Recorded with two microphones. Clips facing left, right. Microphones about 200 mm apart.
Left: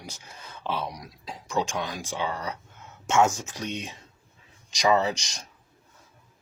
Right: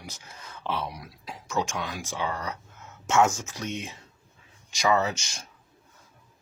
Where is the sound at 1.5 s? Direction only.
30° left (ahead or behind).